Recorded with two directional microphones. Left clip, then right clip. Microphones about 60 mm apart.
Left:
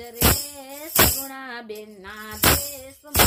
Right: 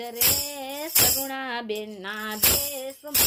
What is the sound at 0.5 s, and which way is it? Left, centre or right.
Tambourine, left.